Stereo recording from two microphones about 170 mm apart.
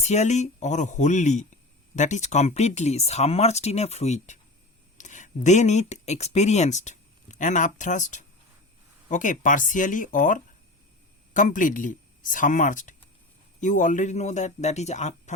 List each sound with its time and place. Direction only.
0.0 s speech: 40° left (ahead or behind)